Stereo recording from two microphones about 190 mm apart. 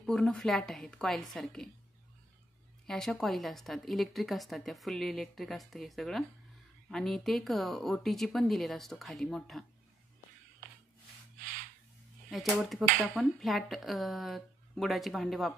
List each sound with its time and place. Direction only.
0.0 s a woman's voice: 5° left (ahead or behind)
2.9 s a woman's voice: centre (ahead or behind)
11.3 s a sound: 45° right (ahead or behind)
12.3 s a woman's voice: centre (ahead or behind)